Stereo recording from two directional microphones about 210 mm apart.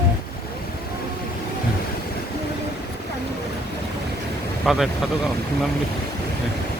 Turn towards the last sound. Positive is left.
turn(degrees=0)  # may be behind; listen again after turning